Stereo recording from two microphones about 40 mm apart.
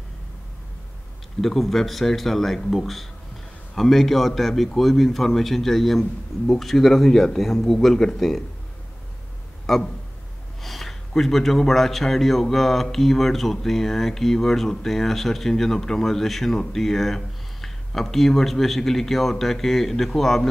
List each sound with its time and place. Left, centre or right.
1.4 s speech: centre
9.7 s speech: centre